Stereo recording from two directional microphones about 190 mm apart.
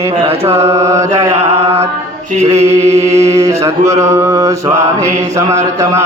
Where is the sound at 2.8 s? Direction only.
35° right (ahead or behind).